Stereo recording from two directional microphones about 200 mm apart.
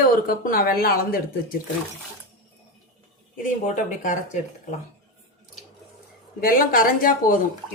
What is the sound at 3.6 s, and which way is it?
Speech, 40° left (ahead or behind).